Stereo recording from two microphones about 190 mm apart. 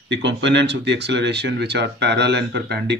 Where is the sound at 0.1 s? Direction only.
70° right (ahead or behind).